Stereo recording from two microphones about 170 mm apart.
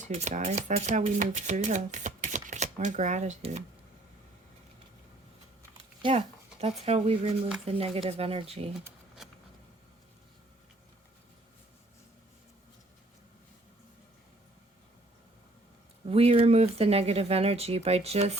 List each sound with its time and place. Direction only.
0.0 s speech: 45° right (ahead or behind)
5.7 s a sound: 35° right (ahead or behind)
6.6 s speech: 35° right (ahead or behind)
16.0 s speech: 35° right (ahead or behind)